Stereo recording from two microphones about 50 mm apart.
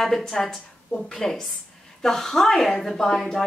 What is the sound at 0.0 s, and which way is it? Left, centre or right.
A woman's voice, centre.